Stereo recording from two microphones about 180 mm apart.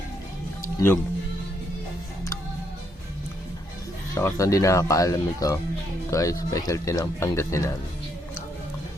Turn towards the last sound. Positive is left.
turn(degrees=15)  # may be behind; listen again after turning